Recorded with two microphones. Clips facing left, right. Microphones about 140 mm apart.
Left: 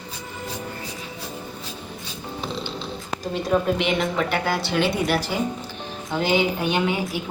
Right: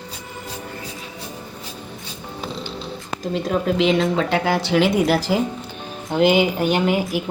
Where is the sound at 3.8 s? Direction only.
90° right.